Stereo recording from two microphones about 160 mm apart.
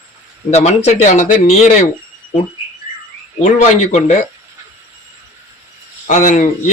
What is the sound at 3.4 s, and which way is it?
Speech, 45° left (ahead or behind).